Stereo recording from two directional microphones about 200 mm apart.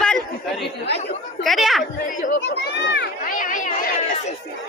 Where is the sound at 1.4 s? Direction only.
Centre (ahead or behind).